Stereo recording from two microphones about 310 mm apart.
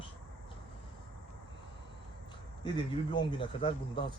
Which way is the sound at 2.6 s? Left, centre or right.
Centre.